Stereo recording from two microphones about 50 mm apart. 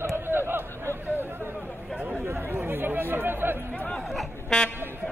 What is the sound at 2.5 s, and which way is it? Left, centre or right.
Speech, right.